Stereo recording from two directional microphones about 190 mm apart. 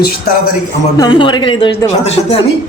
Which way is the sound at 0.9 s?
25° left (ahead or behind).